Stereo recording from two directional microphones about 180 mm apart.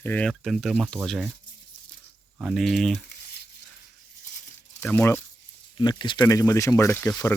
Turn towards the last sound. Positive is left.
turn(degrees=10)  # may be behind; listen again after turning